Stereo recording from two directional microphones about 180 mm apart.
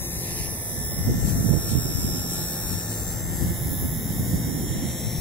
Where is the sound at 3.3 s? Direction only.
Centre (ahead or behind).